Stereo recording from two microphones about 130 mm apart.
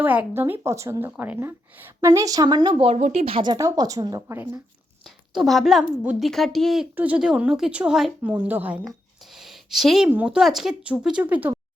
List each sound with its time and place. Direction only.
0.0 s a woman's voice: 15° right (ahead or behind); by 3.0 s 45° right (ahead or behind)
3.0 s speech: 55° right (ahead or behind)
3.4 s speech: 30° right (ahead or behind)
5.3 s speech: centre (ahead or behind)
6.9 s a woman's voice: 10° right (ahead or behind)
9.4 s a sound: centre (ahead or behind)
10.1 s a woman's voice: 10° right (ahead or behind)